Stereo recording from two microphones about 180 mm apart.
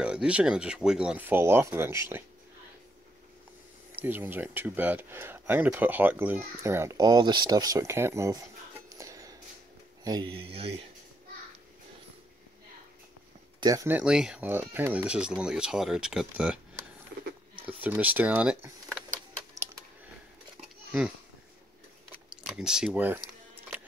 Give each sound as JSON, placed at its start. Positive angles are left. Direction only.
{"t": 0.0, "sound": "speech", "side_deg": -5}
{"t": 3.9, "sound": "speech", "side_deg": -10}
{"t": 8.8, "sound": "music", "side_deg": -20}
{"t": 10.0, "sound": "speech", "side_deg": -25}
{"t": 13.6, "sound": "speech", "side_deg": -20}
{"t": 17.8, "sound": "speech", "side_deg": -10}
{"t": 22.1, "sound": "a sound", "side_deg": -5}